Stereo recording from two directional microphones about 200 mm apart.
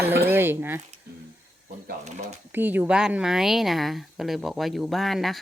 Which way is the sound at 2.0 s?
35° right (ahead or behind).